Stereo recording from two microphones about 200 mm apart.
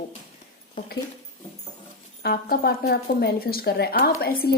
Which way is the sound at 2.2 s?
50° left (ahead or behind).